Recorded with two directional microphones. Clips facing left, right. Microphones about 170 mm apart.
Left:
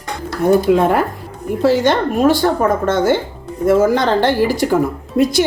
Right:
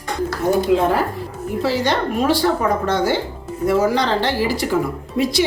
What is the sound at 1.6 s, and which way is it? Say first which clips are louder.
A woman's voice: left 6 dB; 50° left (ahead or behind).